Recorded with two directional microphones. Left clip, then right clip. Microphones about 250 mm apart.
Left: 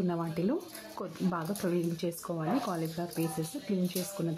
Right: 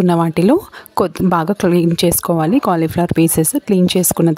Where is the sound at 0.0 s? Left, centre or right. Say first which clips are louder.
Right 19 dB; right.